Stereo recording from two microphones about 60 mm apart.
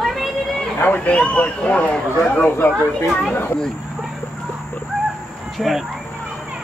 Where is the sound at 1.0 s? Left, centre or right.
Left.